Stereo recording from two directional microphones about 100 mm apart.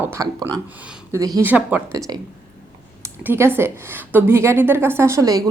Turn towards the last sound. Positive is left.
turn(degrees=-35)  # may be behind; listen again after turning